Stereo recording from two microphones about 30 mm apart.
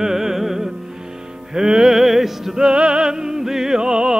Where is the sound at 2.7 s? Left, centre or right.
Right; by 3.8 s centre.